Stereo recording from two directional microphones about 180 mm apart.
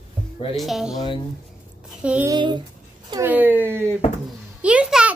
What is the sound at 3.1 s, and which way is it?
A child's voice, 10° right (ahead or behind).